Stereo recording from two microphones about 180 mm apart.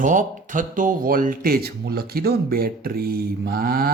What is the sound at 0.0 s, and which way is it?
Speech, 45° right (ahead or behind).